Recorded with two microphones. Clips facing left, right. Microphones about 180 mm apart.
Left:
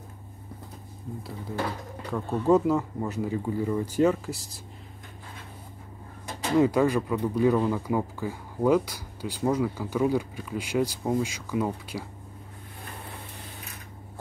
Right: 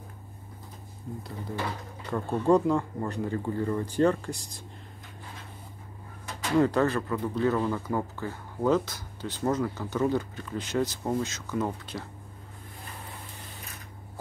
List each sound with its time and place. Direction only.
1.1 s speech: centre (ahead or behind)
6.6 s speech: 10° left (ahead or behind)